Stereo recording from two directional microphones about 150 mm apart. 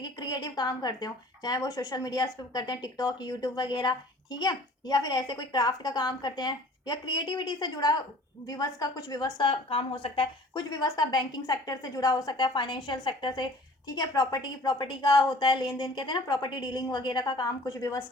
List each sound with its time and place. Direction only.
0.0 s a woman's voice: 25° left (ahead or behind)